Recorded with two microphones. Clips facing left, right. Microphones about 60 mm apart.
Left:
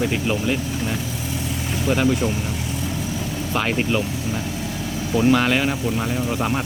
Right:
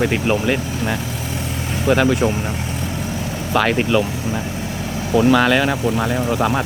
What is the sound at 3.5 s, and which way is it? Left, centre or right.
Speech, right.